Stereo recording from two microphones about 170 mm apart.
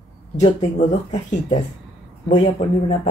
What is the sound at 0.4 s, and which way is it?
Speech, 40° left (ahead or behind).